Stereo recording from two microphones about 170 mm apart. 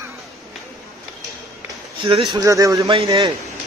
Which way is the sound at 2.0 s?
30° right (ahead or behind).